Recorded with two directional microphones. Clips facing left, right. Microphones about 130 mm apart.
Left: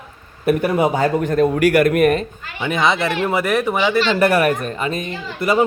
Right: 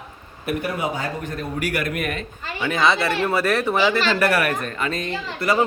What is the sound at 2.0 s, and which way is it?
Speech, 40° left (ahead or behind).